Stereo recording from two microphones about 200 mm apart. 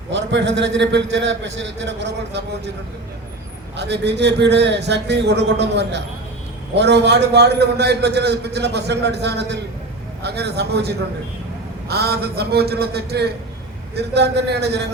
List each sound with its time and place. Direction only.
0.1 s a man's voice: 65° right (ahead or behind)
3.8 s a man's voice: 60° right (ahead or behind)